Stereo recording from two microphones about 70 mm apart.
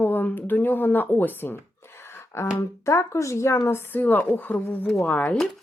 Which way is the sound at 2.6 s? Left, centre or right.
Left.